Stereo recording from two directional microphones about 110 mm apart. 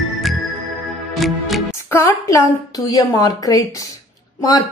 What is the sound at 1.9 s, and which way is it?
A woman's voice, 30° left (ahead or behind).